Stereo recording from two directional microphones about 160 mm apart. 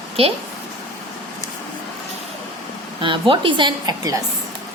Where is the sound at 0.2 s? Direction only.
35° right (ahead or behind).